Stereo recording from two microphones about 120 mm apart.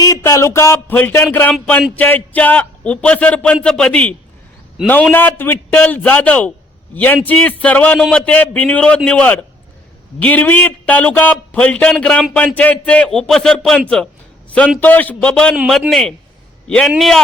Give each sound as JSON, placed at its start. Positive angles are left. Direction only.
{"t": 0.0, "sound": "a man's voice", "side_deg": 25}
{"t": 4.8, "sound": "a man's voice", "side_deg": -5}
{"t": 5.1, "sound": "a man's voice", "side_deg": 15}
{"t": 15.5, "sound": "a man's voice", "side_deg": -5}